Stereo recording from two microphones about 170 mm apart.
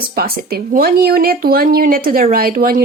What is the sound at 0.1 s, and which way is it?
Speech, 65° right (ahead or behind).